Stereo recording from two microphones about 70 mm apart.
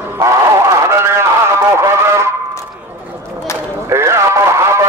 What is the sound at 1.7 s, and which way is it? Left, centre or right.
Music, right.